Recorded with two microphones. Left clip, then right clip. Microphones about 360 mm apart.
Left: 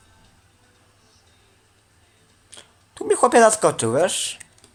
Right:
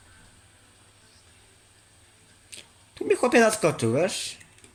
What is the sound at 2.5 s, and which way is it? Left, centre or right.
Speech, centre.